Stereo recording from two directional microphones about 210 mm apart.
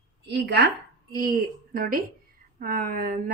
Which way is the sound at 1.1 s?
45° right (ahead or behind).